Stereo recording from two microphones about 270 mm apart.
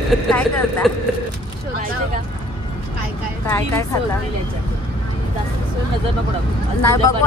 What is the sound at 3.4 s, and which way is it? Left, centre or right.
Speech, centre.